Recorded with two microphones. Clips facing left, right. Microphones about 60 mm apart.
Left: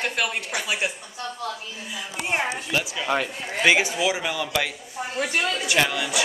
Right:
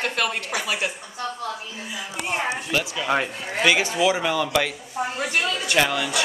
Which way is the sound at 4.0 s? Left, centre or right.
Centre.